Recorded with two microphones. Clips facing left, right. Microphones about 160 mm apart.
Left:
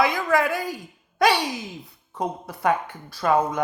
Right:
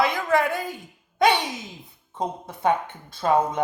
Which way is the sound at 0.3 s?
20° right (ahead or behind).